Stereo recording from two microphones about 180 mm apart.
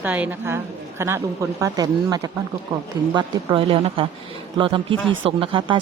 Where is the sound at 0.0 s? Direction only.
10° right (ahead or behind).